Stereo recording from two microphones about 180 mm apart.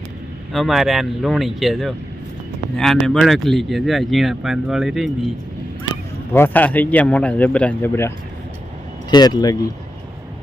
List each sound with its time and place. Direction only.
0.5 s speech: centre (ahead or behind)
6.3 s speech: 10° left (ahead or behind)